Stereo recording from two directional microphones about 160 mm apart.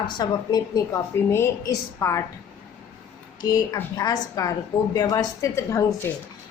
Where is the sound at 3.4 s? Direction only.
25° left (ahead or behind).